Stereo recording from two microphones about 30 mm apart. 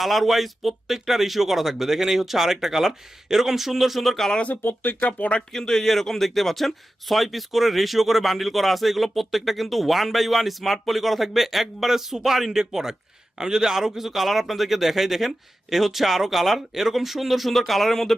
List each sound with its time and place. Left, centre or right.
0.0 s speech: centre
4.9 s speech: left
5.5 s speech: centre